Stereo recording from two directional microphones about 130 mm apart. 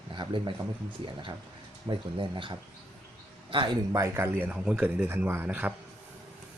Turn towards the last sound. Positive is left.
turn(degrees=-10)  # may be behind; listen again after turning